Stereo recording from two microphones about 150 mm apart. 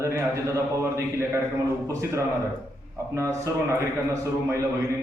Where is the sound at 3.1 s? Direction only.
20° right (ahead or behind).